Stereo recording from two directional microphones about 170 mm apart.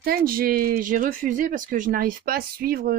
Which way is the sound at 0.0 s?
60° right (ahead or behind).